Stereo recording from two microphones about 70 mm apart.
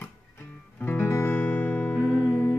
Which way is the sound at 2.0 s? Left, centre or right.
Centre.